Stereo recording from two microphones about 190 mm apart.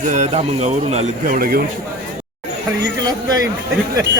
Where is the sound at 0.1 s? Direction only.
35° right (ahead or behind).